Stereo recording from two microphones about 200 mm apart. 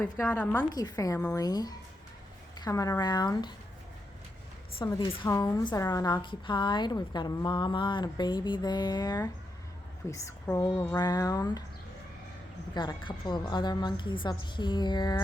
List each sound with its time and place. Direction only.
0.0 s a woman's voice: 10° left (ahead or behind)
0.7 s a woman's voice: 20° left (ahead or behind)
4.8 s a woman's voice: 20° left (ahead or behind)
12.7 s a woman's voice: 20° left (ahead or behind)